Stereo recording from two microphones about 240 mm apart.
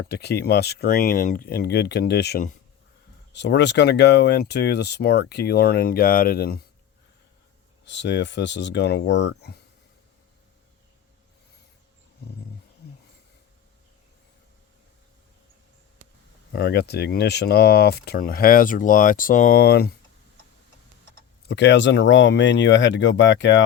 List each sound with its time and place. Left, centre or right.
0.1 s speech: left
7.9 s speech: left
16.5 s speech: left
21.5 s speech: left